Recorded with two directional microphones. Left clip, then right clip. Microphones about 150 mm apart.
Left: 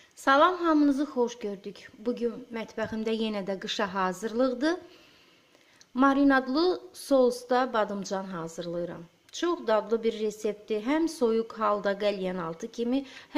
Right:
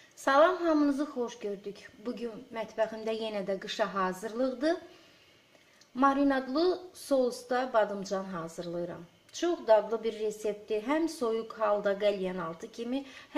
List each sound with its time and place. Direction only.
0.2 s a woman's voice: 35° left (ahead or behind)
5.9 s a woman's voice: 30° left (ahead or behind)